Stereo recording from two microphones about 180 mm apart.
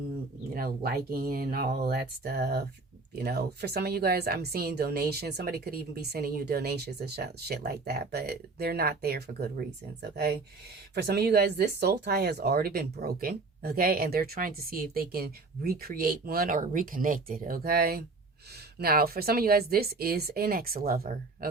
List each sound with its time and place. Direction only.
0.5 s speech: 55° right (ahead or behind)